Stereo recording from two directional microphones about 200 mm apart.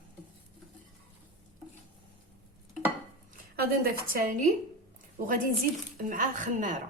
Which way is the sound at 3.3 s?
50° right (ahead or behind).